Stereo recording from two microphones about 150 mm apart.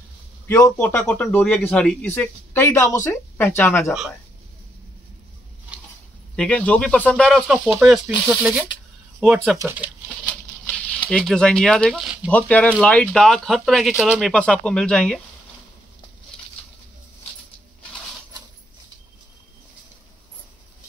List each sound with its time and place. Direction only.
0.7 s speech: 10° left (ahead or behind)
2.0 s speech: 15° left (ahead or behind)
6.3 s speech: 5° left (ahead or behind)
9.6 s speech: 15° right (ahead or behind)
10.2 s a sound: 10° left (ahead or behind)
11.1 s speech: 5° left (ahead or behind)
12.3 s speech: 10° left (ahead or behind)
14.3 s speech: 10° left (ahead or behind)